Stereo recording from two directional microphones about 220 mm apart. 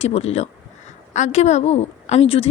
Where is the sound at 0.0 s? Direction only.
30° left (ahead or behind).